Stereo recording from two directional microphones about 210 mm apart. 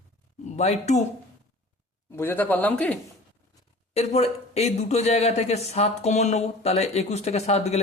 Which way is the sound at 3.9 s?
30° left (ahead or behind).